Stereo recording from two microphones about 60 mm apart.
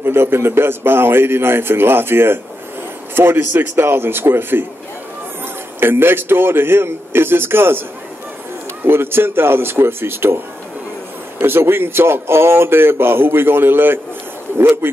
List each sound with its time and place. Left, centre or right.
0.0 s a man's voice: right
5.8 s a man's voice: right
8.8 s a man's voice: right